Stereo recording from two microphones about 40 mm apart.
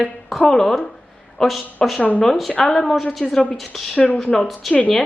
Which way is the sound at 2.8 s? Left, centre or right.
Centre.